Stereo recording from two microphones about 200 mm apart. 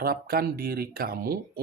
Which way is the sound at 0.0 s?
50° right (ahead or behind).